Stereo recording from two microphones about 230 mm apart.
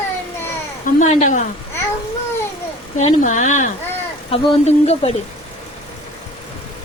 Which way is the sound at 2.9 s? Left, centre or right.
Left.